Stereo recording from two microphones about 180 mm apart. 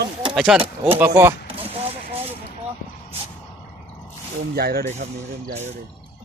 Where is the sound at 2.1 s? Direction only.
30° right (ahead or behind).